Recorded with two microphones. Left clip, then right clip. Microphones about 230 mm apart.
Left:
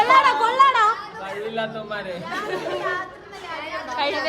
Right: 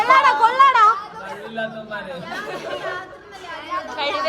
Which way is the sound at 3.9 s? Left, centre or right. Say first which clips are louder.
Even; centre.